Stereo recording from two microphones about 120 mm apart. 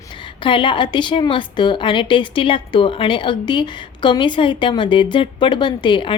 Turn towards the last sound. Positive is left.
turn(degrees=45)  # may be behind; listen again after turning